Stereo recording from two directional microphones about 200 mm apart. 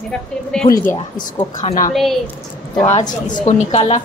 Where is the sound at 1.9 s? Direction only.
Centre (ahead or behind).